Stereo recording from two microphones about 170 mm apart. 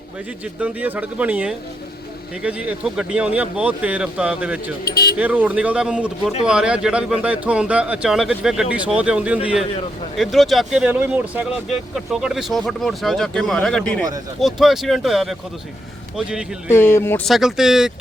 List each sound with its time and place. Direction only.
0.6 s speech: 10° right (ahead or behind)
4.9 s speech: 60° left (ahead or behind)
5.1 s speech: 10° right (ahead or behind)
16.6 s speech: 15° left (ahead or behind)
17.2 s speech: centre (ahead or behind)